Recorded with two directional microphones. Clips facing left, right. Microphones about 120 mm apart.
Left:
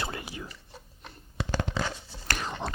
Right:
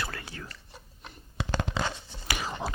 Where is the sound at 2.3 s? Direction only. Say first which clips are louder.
Even; 10° right (ahead or behind).